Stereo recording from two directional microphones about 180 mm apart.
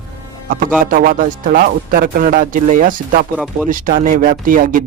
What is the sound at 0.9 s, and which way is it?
Speech, 50° right (ahead or behind).